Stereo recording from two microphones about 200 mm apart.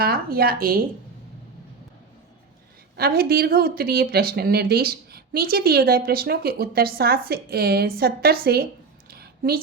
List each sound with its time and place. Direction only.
0.0 s speech: 50° right (ahead or behind)
2.9 s speech: 50° right (ahead or behind)
9.0 s a sound: 50° right (ahead or behind)